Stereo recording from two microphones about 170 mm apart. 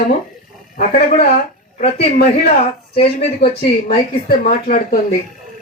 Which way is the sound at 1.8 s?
35° left (ahead or behind).